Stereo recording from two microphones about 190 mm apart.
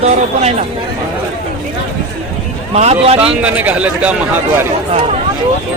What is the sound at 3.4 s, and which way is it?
A man's voice, 10° right (ahead or behind).